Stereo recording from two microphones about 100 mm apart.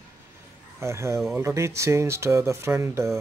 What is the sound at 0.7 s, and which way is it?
Speech, 30° right (ahead or behind).